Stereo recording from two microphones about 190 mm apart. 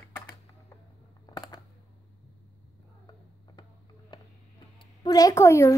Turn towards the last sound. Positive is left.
turn(degrees=15)  # may be behind; listen again after turning